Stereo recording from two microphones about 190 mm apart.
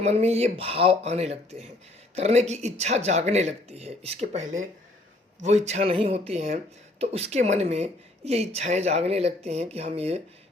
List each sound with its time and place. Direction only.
0.0 s a woman's voice: 35° right (ahead or behind)